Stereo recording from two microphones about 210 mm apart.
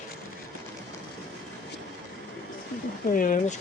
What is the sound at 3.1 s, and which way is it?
Speech, 40° left (ahead or behind).